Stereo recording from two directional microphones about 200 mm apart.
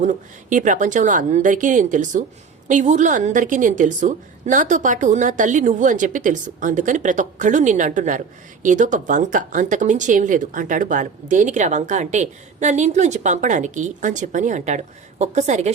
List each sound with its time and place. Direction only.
0.0 s speech: 40° right (ahead or behind)